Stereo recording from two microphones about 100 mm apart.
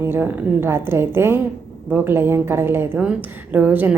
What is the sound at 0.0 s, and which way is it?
A woman's voice, 20° right (ahead or behind).